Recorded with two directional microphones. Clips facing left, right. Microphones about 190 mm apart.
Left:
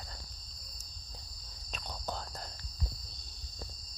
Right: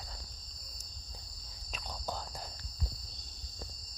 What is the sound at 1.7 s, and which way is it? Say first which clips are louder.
Cricket: even; 5° right (ahead or behind).